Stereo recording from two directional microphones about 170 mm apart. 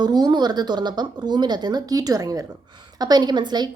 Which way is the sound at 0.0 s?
25° right (ahead or behind).